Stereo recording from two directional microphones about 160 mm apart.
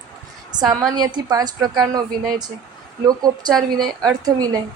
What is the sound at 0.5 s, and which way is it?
Speech, 25° right (ahead or behind).